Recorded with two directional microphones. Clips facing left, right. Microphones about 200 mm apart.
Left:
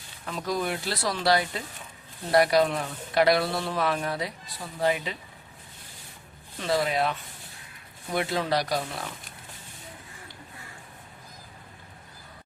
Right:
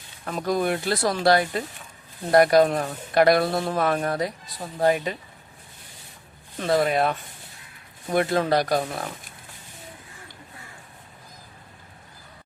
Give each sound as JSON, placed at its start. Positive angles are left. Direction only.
{"t": 0.3, "sound": "speech", "side_deg": -50}
{"t": 6.6, "sound": "speech", "side_deg": -50}